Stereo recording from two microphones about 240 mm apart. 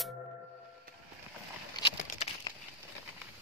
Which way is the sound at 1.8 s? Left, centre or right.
Centre.